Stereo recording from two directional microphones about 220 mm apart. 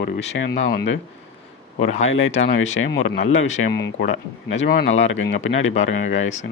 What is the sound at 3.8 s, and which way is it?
Speech, 60° left (ahead or behind).